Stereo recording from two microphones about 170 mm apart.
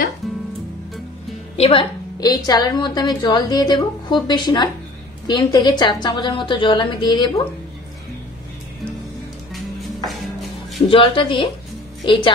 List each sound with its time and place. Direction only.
1.6 s a woman's voice: 30° left (ahead or behind)
10.0 s music: centre (ahead or behind)
10.9 s a woman's voice: 30° left (ahead or behind)